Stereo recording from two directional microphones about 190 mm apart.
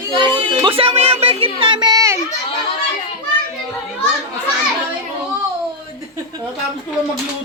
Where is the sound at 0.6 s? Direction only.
30° right (ahead or behind).